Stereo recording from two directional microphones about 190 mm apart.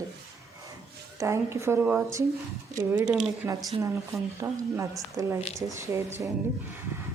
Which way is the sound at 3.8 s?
15° right (ahead or behind).